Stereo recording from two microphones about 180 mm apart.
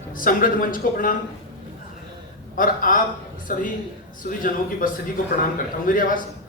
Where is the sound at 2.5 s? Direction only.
50° left (ahead or behind).